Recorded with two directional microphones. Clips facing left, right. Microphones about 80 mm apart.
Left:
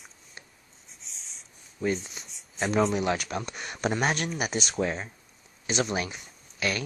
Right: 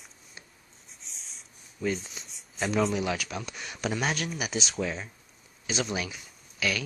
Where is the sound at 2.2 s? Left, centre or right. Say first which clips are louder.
Left 1 dB; centre.